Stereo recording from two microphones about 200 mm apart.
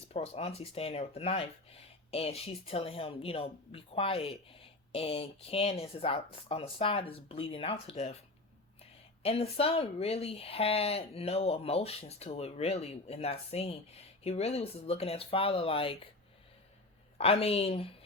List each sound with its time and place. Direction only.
0.1 s speech: 30° left (ahead or behind)
9.2 s speech: 30° left (ahead or behind)
17.2 s speech: 30° left (ahead or behind)